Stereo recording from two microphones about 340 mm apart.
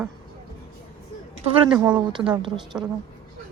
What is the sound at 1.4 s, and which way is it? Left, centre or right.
Speech, centre.